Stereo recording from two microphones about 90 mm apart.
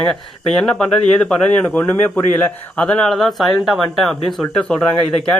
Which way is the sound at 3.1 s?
Centre (ahead or behind).